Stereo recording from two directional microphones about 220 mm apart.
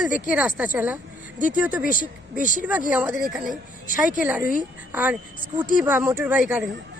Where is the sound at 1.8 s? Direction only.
40° left (ahead or behind).